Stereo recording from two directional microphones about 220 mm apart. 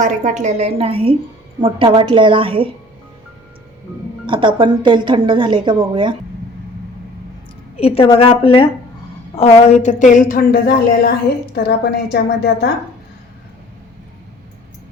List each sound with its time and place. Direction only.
0.0 s a woman's voice: 35° right (ahead or behind)
4.3 s a woman's voice: 20° right (ahead or behind)
7.8 s a woman's voice: 25° left (ahead or behind); by 12.7 s 50° left (ahead or behind)